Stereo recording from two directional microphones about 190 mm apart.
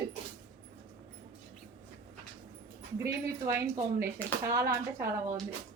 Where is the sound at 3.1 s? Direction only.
15° right (ahead or behind).